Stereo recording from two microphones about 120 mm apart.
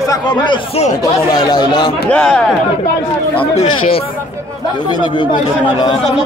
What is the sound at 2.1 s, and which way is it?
Speech, 10° left (ahead or behind).